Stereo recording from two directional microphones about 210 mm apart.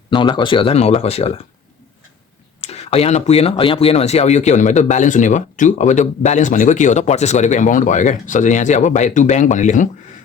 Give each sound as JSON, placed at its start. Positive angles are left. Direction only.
{"t": 0.1, "sound": "speech", "side_deg": 20}
{"t": 2.6, "sound": "speech", "side_deg": 30}